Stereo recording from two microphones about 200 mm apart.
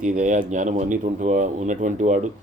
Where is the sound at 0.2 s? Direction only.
40° right (ahead or behind).